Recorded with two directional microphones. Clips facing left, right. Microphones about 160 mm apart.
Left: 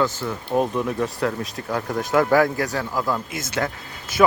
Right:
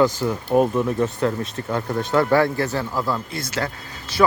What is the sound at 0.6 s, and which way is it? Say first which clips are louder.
Speech: right 3 dB; 5° right (ahead or behind).